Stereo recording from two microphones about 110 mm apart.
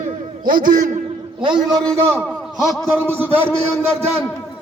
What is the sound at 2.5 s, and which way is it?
A man's voice, centre (ahead or behind).